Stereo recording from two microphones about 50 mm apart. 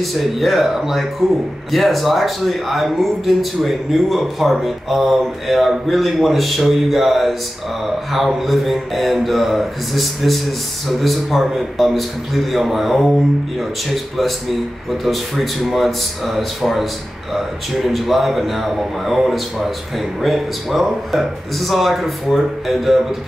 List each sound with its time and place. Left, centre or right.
0.0 s speech: centre
14.9 s speech: centre
17.8 s speech: centre